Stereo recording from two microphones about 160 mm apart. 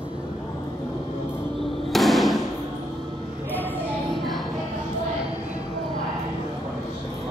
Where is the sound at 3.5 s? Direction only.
10° left (ahead or behind).